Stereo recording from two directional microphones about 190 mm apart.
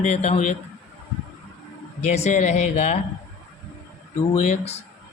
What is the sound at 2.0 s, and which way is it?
A man's voice, 35° left (ahead or behind).